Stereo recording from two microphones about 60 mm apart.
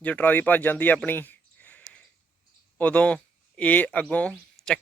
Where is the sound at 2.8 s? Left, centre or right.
Left.